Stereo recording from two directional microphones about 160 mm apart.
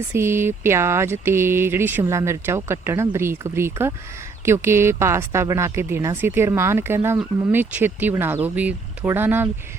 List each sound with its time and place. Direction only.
0.1 s speech: 15° right (ahead or behind)